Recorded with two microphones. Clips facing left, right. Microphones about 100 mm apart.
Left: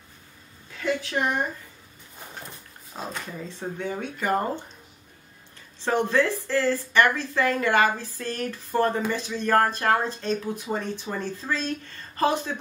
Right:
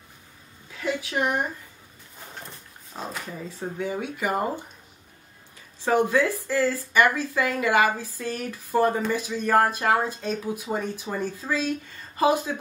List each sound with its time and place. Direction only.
0.7 s speech: 10° right (ahead or behind)
2.9 s speech: centre (ahead or behind)
5.8 s speech: 10° right (ahead or behind)